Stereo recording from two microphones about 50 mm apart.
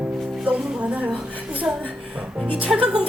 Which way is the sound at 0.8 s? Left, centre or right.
Right.